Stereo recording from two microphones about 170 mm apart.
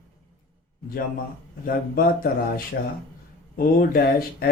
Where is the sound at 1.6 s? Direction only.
60° left (ahead or behind).